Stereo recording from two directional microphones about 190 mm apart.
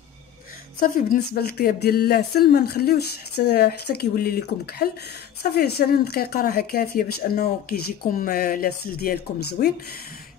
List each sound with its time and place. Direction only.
0.7 s speech: 50° left (ahead or behind)